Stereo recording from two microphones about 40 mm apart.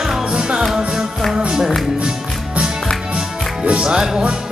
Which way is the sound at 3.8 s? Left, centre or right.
Centre.